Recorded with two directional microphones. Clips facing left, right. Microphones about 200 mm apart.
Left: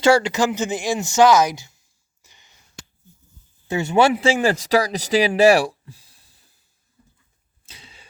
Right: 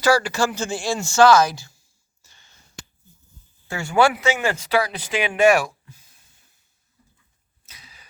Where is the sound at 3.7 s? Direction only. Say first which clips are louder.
Left 2 dB; 20° left (ahead or behind).